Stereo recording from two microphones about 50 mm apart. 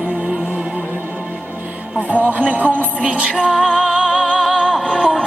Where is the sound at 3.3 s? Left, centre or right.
Centre.